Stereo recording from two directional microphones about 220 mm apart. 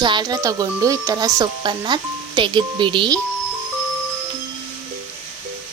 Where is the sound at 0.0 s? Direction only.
20° right (ahead or behind).